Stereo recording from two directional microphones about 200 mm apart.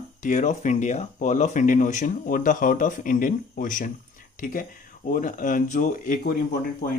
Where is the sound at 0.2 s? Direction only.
40° left (ahead or behind).